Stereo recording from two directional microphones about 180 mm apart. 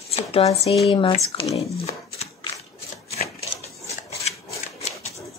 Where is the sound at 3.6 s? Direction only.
35° left (ahead or behind).